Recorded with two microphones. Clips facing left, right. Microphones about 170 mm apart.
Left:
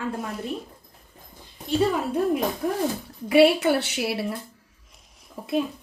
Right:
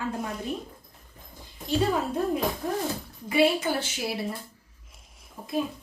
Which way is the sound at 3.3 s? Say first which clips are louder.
Left 6 dB; 70° left (ahead or behind).